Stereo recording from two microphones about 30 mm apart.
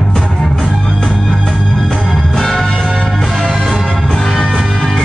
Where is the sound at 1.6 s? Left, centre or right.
Centre.